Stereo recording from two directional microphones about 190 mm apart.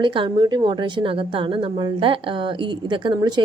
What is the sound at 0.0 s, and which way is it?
A woman's voice, 25° right (ahead or behind).